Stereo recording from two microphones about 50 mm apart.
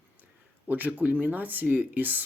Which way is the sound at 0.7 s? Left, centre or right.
Right.